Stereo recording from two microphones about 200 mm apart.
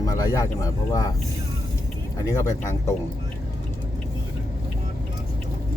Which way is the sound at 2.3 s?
15° left (ahead or behind).